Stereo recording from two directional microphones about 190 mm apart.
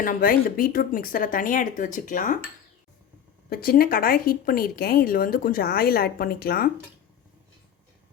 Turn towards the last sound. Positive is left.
turn(degrees=50)  # may be behind; listen again after turning